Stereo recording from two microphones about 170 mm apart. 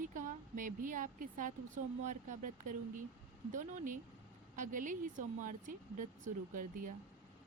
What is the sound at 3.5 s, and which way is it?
Speech, 50° right (ahead or behind).